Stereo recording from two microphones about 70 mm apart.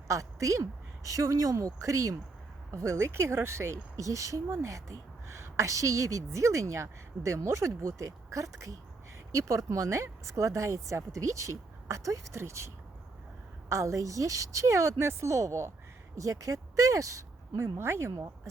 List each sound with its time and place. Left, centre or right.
0.1 s speech: right